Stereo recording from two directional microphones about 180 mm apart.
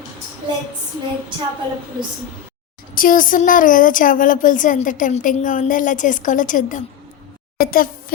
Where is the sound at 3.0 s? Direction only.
50° left (ahead or behind).